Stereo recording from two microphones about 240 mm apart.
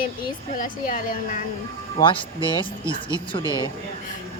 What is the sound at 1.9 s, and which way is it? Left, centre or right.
Speech, left.